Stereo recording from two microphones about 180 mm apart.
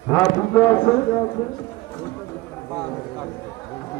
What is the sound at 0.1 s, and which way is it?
Speech, 20° left (ahead or behind).